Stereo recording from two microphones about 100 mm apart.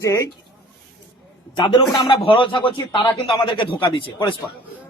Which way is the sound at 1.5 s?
45° left (ahead or behind).